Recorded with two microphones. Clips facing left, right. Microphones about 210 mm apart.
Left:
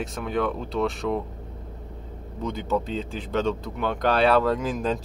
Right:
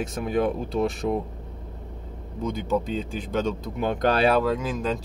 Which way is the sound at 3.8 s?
40° right (ahead or behind).